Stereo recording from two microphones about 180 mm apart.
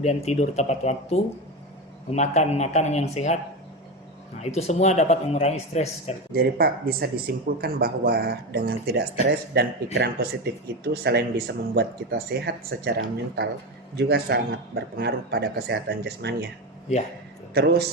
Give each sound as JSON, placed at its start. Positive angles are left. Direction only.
{"t": 0.0, "sound": "speech", "side_deg": 35}
{"t": 4.5, "sound": "speech", "side_deg": 40}
{"t": 6.3, "sound": "speech", "side_deg": -60}
{"t": 17.5, "sound": "speech", "side_deg": -65}